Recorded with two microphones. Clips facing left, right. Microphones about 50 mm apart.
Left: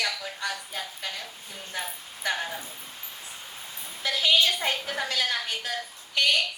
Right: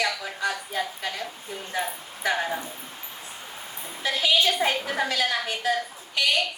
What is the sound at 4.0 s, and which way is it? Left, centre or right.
A woman's voice, right.